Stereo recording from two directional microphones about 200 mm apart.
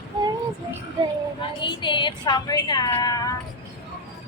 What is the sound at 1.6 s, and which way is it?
Speech, 25° left (ahead or behind).